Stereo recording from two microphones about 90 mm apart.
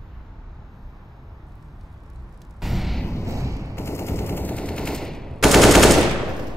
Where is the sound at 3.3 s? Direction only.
35° right (ahead or behind).